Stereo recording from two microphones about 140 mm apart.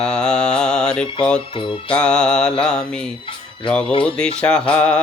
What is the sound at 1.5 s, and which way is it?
Music, 35° left (ahead or behind).